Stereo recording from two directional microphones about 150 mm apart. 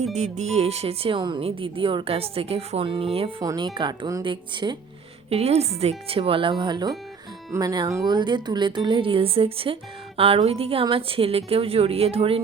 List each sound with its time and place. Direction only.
0.1 s speech: 50° right (ahead or behind)
3.4 s speech: 25° right (ahead or behind)
5.3 s speech: 45° right (ahead or behind)